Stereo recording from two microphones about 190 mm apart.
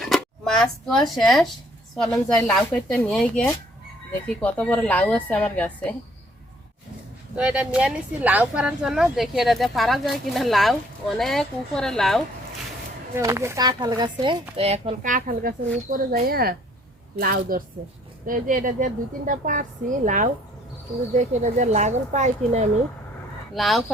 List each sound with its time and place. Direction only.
0.0 s a woman's voice: centre (ahead or behind)
7.3 s speech: 5° right (ahead or behind)
13.1 s a woman's voice: 15° right (ahead or behind); by 22.7 s 35° right (ahead or behind)
23.6 s speech: centre (ahead or behind)